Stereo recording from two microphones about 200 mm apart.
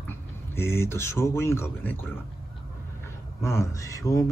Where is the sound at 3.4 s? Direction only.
15° left (ahead or behind).